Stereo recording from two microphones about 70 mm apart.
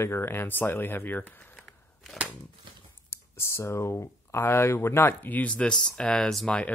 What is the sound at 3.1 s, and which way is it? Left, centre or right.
Speech, left.